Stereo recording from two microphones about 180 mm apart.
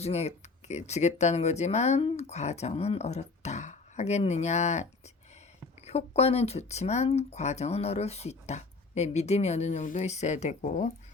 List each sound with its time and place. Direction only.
0.0 s speech: 35° left (ahead or behind)